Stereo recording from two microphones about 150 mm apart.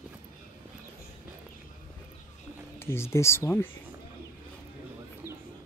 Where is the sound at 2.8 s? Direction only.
15° left (ahead or behind).